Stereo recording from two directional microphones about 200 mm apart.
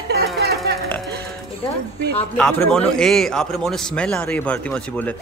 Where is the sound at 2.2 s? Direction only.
5° left (ahead or behind).